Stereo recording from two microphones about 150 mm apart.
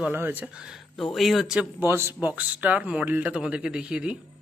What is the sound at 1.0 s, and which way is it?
Speech, centre (ahead or behind).